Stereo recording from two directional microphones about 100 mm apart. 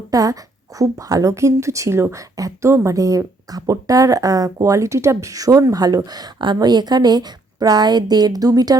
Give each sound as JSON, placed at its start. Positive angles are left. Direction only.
{"t": 0.1, "sound": "a woman's voice", "side_deg": -35}